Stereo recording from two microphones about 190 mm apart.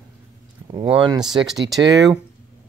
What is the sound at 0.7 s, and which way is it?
Speech, 25° right (ahead or behind).